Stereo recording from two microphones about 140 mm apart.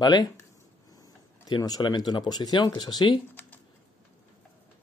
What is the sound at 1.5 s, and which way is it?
Speech, 30° left (ahead or behind).